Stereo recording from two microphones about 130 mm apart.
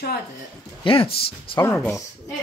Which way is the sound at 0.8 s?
45° left (ahead or behind).